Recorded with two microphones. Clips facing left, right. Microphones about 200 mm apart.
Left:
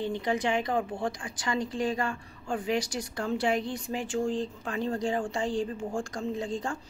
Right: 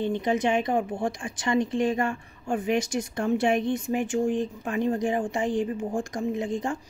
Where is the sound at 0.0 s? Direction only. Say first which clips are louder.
Right 4 dB; 20° right (ahead or behind).